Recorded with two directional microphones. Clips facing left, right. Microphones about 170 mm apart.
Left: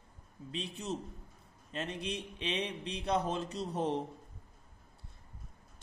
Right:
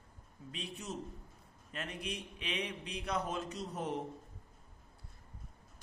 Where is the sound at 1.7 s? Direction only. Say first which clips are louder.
Left 4 dB; 25° left (ahead or behind).